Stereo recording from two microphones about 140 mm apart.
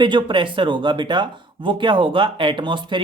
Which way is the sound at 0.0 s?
35° right (ahead or behind).